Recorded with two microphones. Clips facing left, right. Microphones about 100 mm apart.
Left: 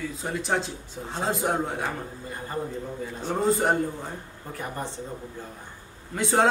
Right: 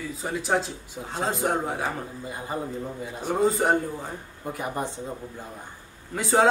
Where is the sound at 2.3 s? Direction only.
15° right (ahead or behind).